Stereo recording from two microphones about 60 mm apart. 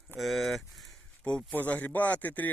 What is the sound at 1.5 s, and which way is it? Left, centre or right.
Speech, left.